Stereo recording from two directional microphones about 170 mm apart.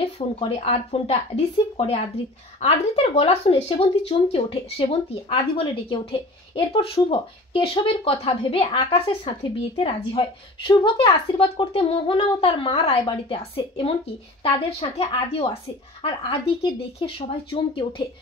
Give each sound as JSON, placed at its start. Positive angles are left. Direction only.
{"t": 0.0, "sound": "speech", "side_deg": 35}